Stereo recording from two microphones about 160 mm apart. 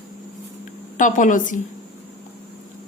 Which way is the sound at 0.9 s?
55° left (ahead or behind).